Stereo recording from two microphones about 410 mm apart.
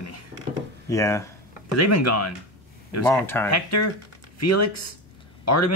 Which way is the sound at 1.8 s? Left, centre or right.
Left.